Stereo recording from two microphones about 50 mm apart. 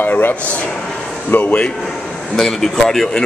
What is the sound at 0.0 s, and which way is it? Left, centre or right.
Speech, left.